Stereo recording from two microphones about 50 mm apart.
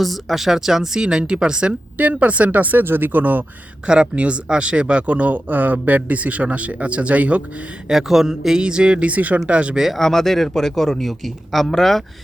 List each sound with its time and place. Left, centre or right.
0.0 s speech: centre
2.0 s speech: right
3.8 s speech: centre
7.9 s speech: centre; by 9.7 s right
9.7 s a man's voice: centre
10.0 s a man's voice: centre